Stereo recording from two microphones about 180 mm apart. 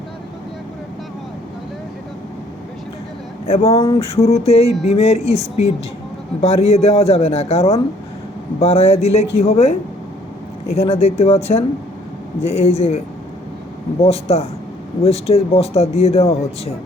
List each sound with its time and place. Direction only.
3.4 s speech: 35° left (ahead or behind)
14.0 s speech: 35° left (ahead or behind)